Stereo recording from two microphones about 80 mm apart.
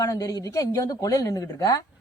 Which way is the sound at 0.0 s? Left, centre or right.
Left.